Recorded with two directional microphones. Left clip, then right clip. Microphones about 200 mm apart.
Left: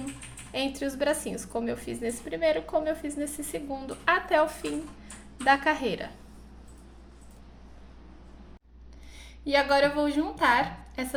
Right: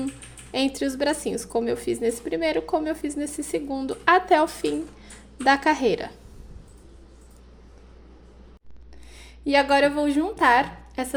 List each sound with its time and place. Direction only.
0.7 s a woman's voice: 35° right (ahead or behind)
9.1 s speech: 45° right (ahead or behind)